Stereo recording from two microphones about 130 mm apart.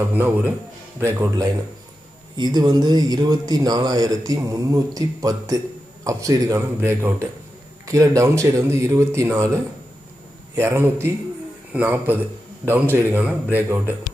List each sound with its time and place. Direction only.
0.1 s speech: 15° right (ahead or behind)
2.3 s speech: 35° right (ahead or behind); by 13.8 s 15° right (ahead or behind)